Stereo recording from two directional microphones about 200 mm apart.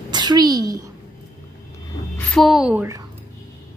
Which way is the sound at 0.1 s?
20° right (ahead or behind).